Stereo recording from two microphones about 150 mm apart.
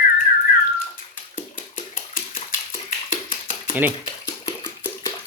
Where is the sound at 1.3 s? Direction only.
65° left (ahead or behind).